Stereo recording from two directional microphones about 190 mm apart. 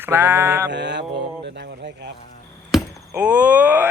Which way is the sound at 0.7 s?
65° right (ahead or behind).